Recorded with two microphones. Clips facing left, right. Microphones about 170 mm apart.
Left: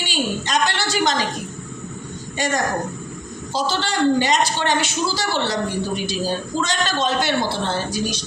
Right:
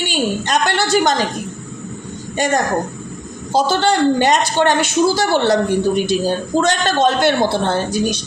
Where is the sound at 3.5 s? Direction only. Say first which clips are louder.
Right 8 dB; 55° right (ahead or behind).